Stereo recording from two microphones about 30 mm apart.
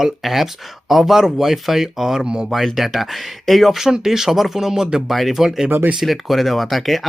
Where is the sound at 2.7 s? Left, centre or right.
Centre.